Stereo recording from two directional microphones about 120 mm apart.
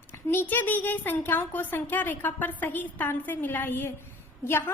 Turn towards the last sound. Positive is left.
turn(degrees=20)  # may be behind; listen again after turning